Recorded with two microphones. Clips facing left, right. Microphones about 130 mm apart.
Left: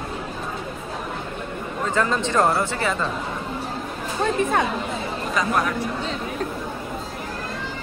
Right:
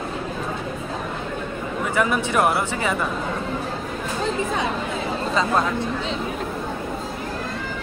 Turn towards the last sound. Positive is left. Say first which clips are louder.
# right 1 dB
turn(degrees=-25)  # may be behind; listen again after turning